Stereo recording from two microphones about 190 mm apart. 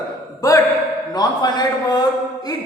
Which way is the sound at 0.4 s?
20° left (ahead or behind).